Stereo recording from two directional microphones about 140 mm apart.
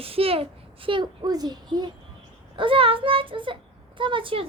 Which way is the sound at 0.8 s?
30° right (ahead or behind).